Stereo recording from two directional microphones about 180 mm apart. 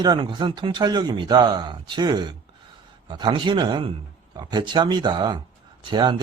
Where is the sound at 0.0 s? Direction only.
25° right (ahead or behind).